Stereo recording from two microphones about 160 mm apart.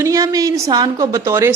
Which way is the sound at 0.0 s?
20° right (ahead or behind).